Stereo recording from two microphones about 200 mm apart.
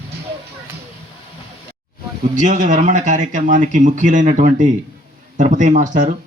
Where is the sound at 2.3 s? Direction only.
40° right (ahead or behind).